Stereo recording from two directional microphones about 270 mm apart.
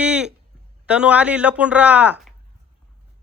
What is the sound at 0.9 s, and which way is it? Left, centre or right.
Speech, centre.